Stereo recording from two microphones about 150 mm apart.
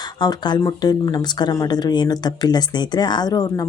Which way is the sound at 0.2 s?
30° left (ahead or behind).